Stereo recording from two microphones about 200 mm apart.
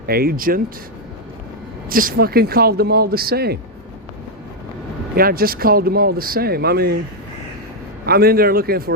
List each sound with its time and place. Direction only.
0.0 s speech: 50° right (ahead or behind)
1.9 s speech: 45° right (ahead or behind)
5.1 s speech: 45° right (ahead or behind)
8.0 s speech: 50° right (ahead or behind)